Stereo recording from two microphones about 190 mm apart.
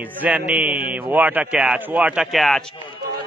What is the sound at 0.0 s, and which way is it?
A man's voice, 10° right (ahead or behind).